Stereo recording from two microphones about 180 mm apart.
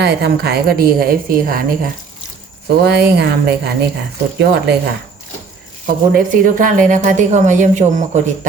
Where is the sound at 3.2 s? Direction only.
65° right (ahead or behind).